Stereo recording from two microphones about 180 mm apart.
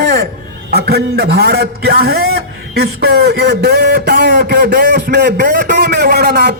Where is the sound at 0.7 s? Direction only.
60° right (ahead or behind).